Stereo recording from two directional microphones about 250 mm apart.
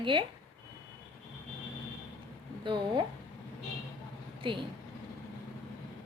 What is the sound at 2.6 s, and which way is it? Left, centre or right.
Speech, centre.